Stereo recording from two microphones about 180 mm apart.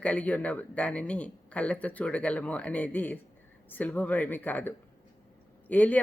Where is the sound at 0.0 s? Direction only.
5° left (ahead or behind).